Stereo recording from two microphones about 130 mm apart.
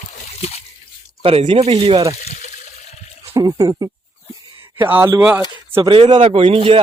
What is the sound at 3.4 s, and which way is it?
Speech, 30° right (ahead or behind).